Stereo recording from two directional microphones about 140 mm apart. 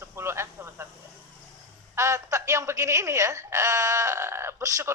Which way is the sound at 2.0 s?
20° right (ahead or behind).